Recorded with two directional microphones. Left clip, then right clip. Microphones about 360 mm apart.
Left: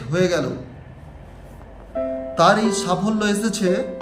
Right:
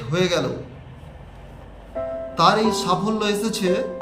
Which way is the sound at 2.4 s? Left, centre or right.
Centre.